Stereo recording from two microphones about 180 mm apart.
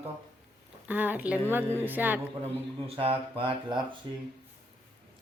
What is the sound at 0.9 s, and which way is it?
Speech, 10° right (ahead or behind).